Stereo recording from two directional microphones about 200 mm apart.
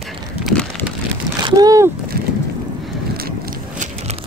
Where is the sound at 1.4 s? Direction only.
20° right (ahead or behind).